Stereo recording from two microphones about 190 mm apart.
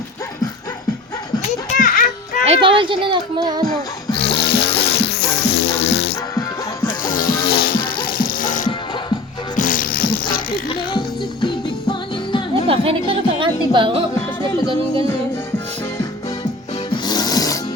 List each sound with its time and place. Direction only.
1.8 s music: 45° left (ahead or behind)
2.4 s a child's voice: 30° right (ahead or behind)
4.2 s music: 55° left (ahead or behind)
7.0 s music: 45° left (ahead or behind)
11.4 s music: 25° left (ahead or behind)
12.6 s speech: 30° right (ahead or behind)
16.9 s music: 20° left (ahead or behind)